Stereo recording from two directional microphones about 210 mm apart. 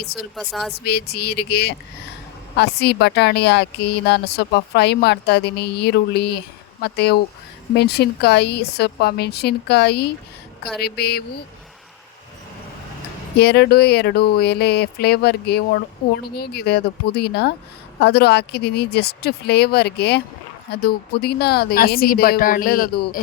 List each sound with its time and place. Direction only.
0.0 s a woman's voice: 50° left (ahead or behind)
0.3 s speech: centre (ahead or behind)
0.7 s a woman's voice: 50° left (ahead or behind)
13.4 s a woman's voice: 50° left (ahead or behind)